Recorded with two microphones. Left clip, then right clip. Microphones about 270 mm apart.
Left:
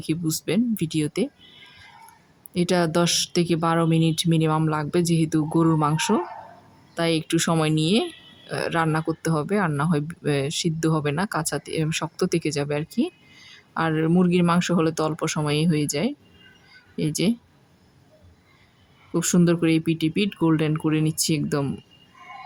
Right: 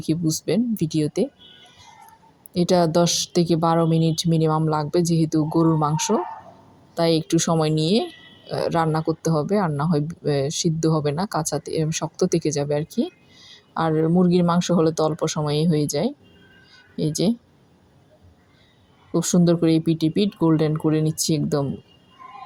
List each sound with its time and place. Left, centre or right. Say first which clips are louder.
0.4 s speech: even; centre
2.5 s speech: right 3 dB; centre
13.0 s a sound: even; left
13.5 s speech: right 2 dB; centre
19.1 s speech: right 2 dB; centre